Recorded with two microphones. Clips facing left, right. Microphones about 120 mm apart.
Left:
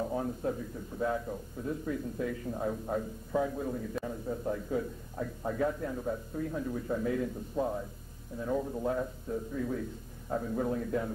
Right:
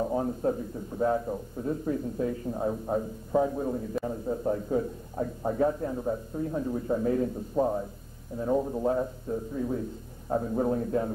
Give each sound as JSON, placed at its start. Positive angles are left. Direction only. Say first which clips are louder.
{"t": 0.0, "sound": "a man's voice", "louder": "right 5 dB", "side_deg": -30}